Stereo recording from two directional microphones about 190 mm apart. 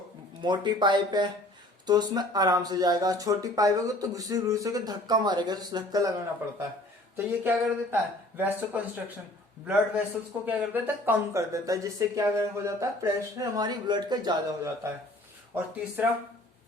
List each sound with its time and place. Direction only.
0.4 s speech: 25° right (ahead or behind)
10.4 s speech: 10° right (ahead or behind)